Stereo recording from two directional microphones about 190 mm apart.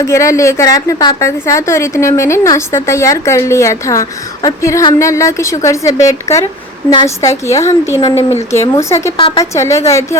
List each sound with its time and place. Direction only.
0.0 s a woman's voice: 15° left (ahead or behind)
7.2 s a woman's voice: 15° left (ahead or behind)
9.1 s a woman's voice: 30° left (ahead or behind)
9.4 s a woman's voice: 15° left (ahead or behind)